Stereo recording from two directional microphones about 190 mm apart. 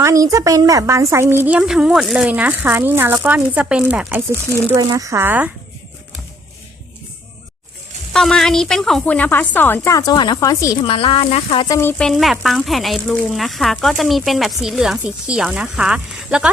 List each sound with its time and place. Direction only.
0.0 s a woman's voice: 15° right (ahead or behind)
4.7 s a woman's voice: 20° right (ahead or behind)
8.1 s a woman's voice: centre (ahead or behind)
10.8 s speech: 30° left (ahead or behind)
11.7 s speech: 10° left (ahead or behind); by 16.5 s 5° right (ahead or behind)